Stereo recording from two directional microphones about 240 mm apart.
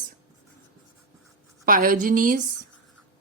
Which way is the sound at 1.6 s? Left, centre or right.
Right.